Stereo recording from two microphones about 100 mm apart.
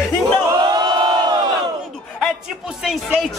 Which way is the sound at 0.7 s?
50° right (ahead or behind).